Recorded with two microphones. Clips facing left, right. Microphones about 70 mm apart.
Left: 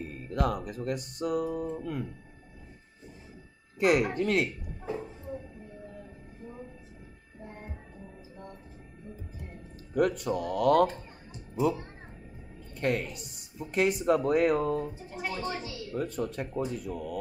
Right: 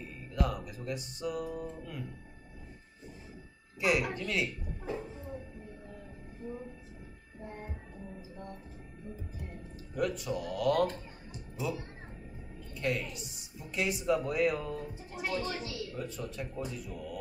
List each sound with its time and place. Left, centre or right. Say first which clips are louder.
0.0 s speech: left 4 dB; left
3.8 s speech: left 6 dB; left
9.9 s speech: left 6 dB; left
15.2 s speech: left 1 dB; left
15.9 s speech: left 7 dB; left